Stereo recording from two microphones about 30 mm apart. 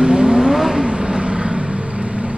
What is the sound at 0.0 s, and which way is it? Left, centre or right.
Vehicle, right.